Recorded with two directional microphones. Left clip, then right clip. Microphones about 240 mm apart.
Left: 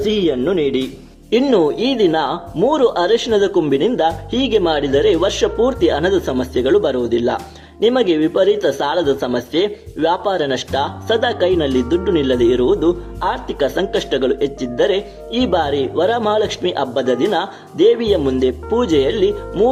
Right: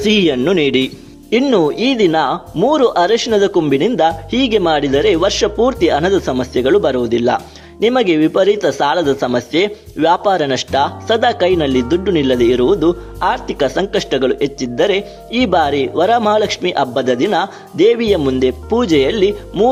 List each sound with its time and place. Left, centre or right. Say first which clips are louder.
0.0 s speech: right 3 dB; right